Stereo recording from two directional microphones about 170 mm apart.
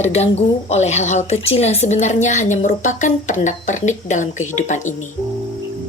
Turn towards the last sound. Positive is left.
turn(degrees=45)  # may be behind; listen again after turning